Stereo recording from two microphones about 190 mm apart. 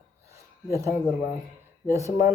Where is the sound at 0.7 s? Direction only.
15° right (ahead or behind).